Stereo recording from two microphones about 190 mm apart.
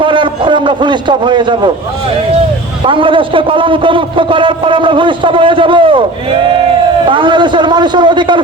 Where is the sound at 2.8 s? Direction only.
25° right (ahead or behind).